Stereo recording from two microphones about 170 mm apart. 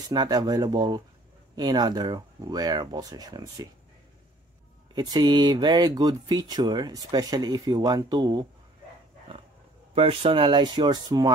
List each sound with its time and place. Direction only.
0.1 s speech: 25° right (ahead or behind)
4.9 s speech: 25° right (ahead or behind)
9.9 s speech: 30° right (ahead or behind)